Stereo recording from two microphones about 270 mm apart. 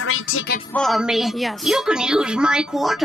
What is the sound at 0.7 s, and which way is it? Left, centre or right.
A woman's voice, centre.